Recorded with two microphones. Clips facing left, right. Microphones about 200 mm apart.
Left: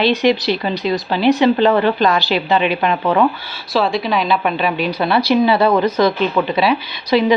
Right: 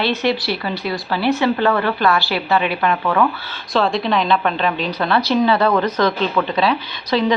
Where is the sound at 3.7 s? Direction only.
Centre (ahead or behind).